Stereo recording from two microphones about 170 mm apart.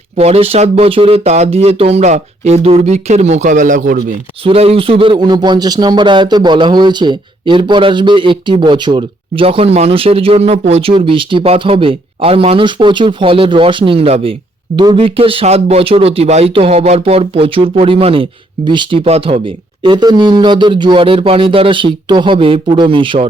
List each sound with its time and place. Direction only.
0.2 s speech: 35° right (ahead or behind)
4.4 s a man's voice: 35° right (ahead or behind)